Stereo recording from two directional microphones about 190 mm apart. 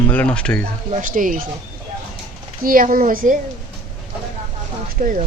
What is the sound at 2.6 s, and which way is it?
Speech, 50° right (ahead or behind).